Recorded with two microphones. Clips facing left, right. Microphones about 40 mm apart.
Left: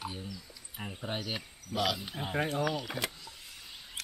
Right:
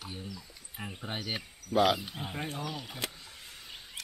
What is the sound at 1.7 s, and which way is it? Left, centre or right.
Speech, right.